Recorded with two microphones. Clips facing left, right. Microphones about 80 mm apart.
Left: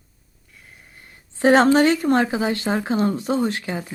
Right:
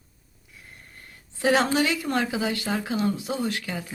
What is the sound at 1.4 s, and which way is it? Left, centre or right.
A woman's voice, left.